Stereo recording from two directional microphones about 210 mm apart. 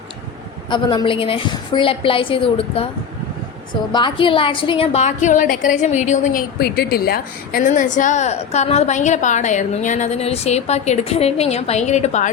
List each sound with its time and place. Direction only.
0.7 s a woman's voice: 20° left (ahead or behind)
3.9 s a woman's voice: 25° left (ahead or behind)
6.6 s a woman's voice: 45° left (ahead or behind)